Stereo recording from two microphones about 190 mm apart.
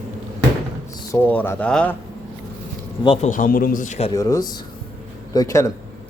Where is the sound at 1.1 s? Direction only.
10° left (ahead or behind).